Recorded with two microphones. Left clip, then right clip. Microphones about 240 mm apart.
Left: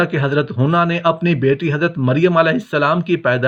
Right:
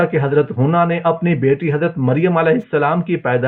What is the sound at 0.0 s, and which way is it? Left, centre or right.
Speech, left.